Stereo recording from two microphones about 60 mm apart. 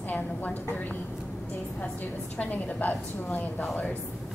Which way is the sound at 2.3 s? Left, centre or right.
Left.